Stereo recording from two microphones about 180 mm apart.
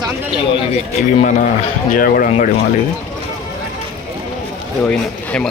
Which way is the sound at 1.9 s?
50° left (ahead or behind).